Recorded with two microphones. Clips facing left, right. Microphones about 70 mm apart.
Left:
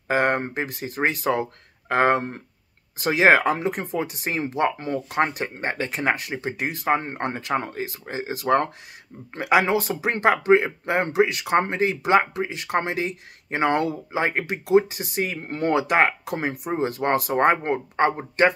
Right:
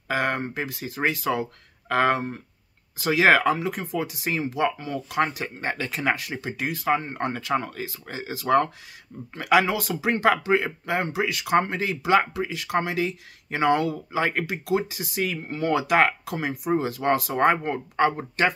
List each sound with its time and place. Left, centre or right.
0.1 s speech: left
15.4 s speech: left
15.7 s speech: left